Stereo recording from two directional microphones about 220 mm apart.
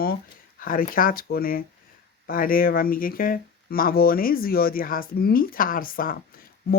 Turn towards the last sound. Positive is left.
turn(degrees=40)  # may be behind; listen again after turning